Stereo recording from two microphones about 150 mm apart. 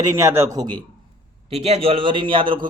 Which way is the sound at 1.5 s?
45° right (ahead or behind).